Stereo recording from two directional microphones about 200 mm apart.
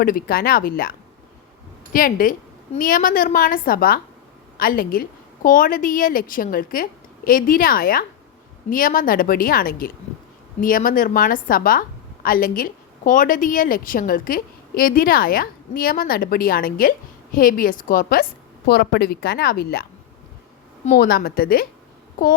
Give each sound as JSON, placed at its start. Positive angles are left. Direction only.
{"t": 0.0, "sound": "a woman's voice", "side_deg": 45}
{"t": 20.9, "sound": "a woman's voice", "side_deg": 50}